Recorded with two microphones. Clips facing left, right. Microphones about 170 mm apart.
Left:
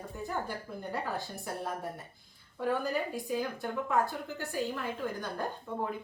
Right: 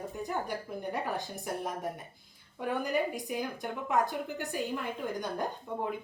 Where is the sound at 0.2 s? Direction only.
15° right (ahead or behind).